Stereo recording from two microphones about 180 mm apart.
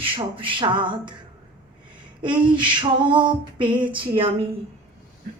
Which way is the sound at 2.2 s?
25° right (ahead or behind).